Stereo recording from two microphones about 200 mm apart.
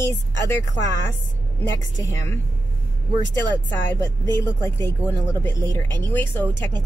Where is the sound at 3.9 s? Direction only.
10° left (ahead or behind).